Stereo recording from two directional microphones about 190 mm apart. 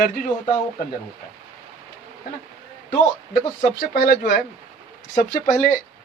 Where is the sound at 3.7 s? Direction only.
55° left (ahead or behind).